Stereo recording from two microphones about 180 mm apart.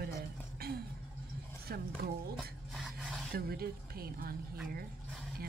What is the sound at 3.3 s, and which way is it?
Speech, 60° right (ahead or behind).